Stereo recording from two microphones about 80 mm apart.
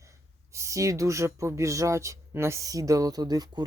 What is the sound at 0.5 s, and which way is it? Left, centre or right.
Speech, right.